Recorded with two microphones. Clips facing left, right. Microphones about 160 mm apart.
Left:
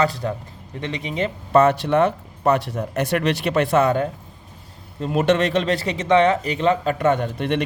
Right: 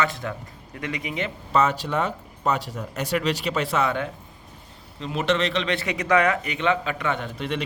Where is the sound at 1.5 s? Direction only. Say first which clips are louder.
Left 7 dB; 55° left (ahead or behind).